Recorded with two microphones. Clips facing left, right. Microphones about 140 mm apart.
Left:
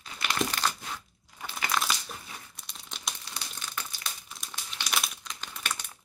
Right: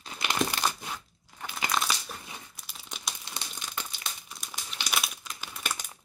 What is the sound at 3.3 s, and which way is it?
Crumpling, 20° right (ahead or behind).